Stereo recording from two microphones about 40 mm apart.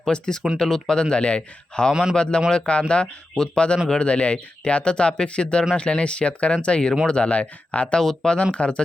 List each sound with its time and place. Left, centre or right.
0.1 s speech: centre
1.1 s speech: left
1.9 s a man's voice: centre
2.1 s speech: left
7.9 s speech: centre
8.5 s speech: left